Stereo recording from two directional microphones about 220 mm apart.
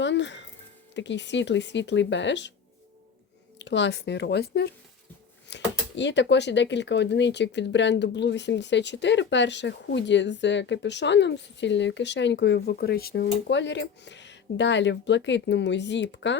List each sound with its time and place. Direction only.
0.0 s music: 55° left (ahead or behind)
0.9 s speech: 55° left (ahead or behind)
3.6 s speech: 55° left (ahead or behind)